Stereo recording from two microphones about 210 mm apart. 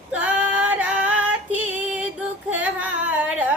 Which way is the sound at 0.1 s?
5° right (ahead or behind).